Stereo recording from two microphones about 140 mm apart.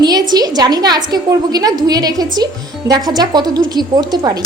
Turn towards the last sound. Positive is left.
turn(degrees=-30)  # may be behind; listen again after turning